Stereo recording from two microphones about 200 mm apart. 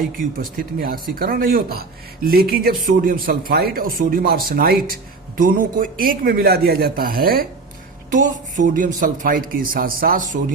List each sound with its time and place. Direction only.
0.0 s speech: 45° right (ahead or behind)